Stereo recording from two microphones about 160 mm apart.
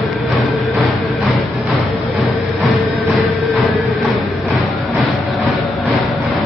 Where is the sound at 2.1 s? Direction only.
Centre (ahead or behind).